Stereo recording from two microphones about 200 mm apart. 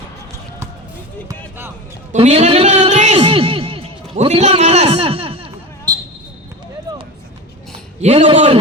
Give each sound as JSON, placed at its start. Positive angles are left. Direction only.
{"t": 2.1, "sound": "a sound", "side_deg": -35}
{"t": 4.9, "sound": "basketball bounce", "side_deg": -25}
{"t": 8.0, "sound": "a man's voice", "side_deg": -30}